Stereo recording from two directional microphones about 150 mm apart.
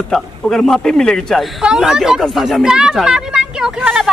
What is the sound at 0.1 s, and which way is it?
Speech, 5° left (ahead or behind).